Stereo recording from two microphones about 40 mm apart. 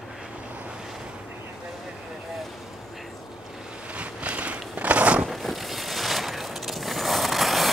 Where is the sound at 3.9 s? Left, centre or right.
Right.